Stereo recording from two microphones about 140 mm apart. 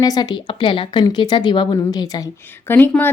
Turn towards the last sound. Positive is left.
turn(degrees=15)  # may be behind; listen again after turning